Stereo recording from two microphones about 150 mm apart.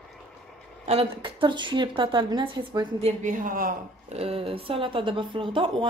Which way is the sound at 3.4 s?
70° right (ahead or behind).